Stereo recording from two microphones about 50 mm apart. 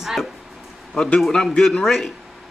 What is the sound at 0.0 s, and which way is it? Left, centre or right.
Speech, centre.